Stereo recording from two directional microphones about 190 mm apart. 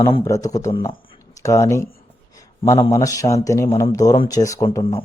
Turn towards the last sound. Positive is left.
turn(degrees=20)  # may be behind; listen again after turning